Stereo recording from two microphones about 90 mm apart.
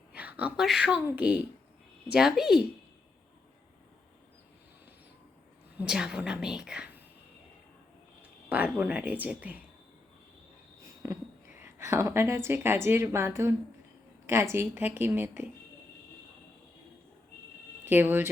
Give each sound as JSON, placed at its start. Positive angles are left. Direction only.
{"t": 0.1, "sound": "a sound", "side_deg": -15}
{"t": 0.6, "sound": "a woman's voice", "side_deg": -5}
{"t": 2.1, "sound": "speech", "side_deg": -5}
{"t": 5.7, "sound": "a woman's voice", "side_deg": -10}
{"t": 8.2, "sound": "a sound", "side_deg": -15}
{"t": 8.7, "sound": "a woman's voice", "side_deg": -15}
{"t": 11.0, "sound": "a sound", "side_deg": -35}
{"t": 11.6, "sound": "a woman's voice", "side_deg": -30}
{"t": 17.8, "sound": "speech", "side_deg": -20}